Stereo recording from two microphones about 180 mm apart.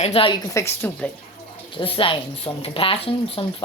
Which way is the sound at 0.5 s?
15° left (ahead or behind).